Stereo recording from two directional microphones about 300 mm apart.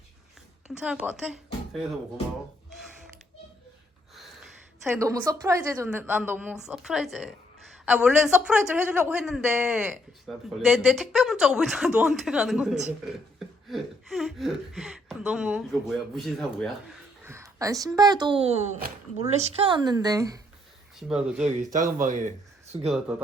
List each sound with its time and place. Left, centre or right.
0.7 s speech: centre
4.1 s a woman's voice: centre
21.4 s speech: right